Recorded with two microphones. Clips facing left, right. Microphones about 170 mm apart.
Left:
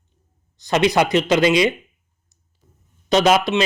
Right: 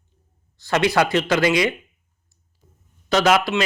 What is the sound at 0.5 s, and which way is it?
Speech, 20° left (ahead or behind).